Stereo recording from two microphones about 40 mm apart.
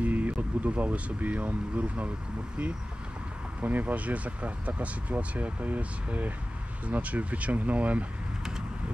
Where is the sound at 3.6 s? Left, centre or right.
Right.